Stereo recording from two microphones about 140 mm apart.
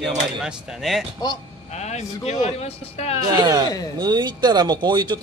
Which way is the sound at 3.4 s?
30° right (ahead or behind).